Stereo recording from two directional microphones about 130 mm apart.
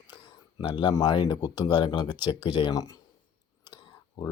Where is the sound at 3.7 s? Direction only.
30° left (ahead or behind).